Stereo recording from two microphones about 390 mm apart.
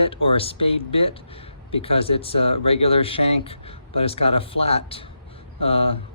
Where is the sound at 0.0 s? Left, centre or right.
Centre.